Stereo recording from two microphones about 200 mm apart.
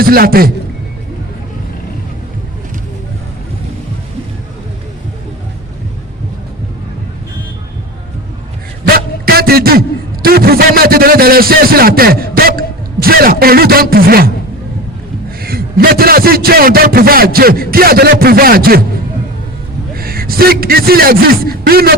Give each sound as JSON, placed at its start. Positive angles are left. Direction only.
{"t": 0.0, "sound": "a man's voice", "side_deg": -50}
{"t": 8.9, "sound": "a sound", "side_deg": -50}
{"t": 10.2, "sound": "a man's voice", "side_deg": -50}
{"t": 15.4, "sound": "a man's voice", "side_deg": -50}
{"t": 20.0, "sound": "speech", "side_deg": -50}